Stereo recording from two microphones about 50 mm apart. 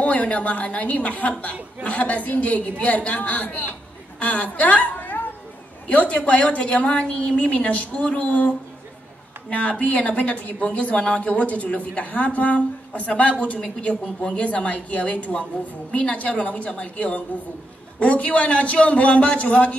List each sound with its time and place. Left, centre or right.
0.0 s a man's voice: left
9.5 s speech: left